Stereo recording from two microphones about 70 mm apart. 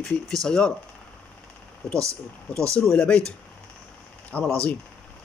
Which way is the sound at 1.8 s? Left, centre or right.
Centre.